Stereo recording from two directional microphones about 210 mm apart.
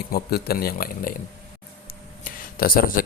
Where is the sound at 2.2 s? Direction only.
45° left (ahead or behind).